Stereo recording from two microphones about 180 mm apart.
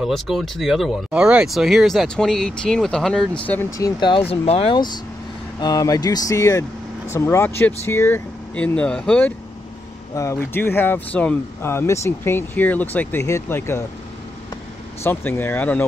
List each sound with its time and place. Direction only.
0.0 s speech: centre (ahead or behind)
3.4 s speech: 15° left (ahead or behind)
4.3 s speech: 35° left (ahead or behind); by 9.3 s 5° left (ahead or behind)
10.1 s speech: 15° left (ahead or behind)
15.0 s speech: 10° left (ahead or behind)